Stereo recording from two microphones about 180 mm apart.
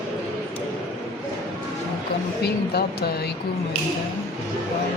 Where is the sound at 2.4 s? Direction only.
65° left (ahead or behind).